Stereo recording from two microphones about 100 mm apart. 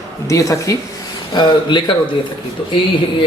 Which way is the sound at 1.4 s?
50° left (ahead or behind).